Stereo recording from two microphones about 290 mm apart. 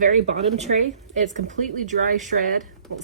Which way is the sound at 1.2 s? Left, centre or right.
Right.